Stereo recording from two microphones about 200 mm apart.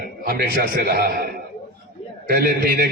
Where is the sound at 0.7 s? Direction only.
50° right (ahead or behind).